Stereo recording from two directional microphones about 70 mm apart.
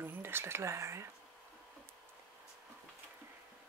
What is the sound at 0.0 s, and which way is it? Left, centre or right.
Speech, right.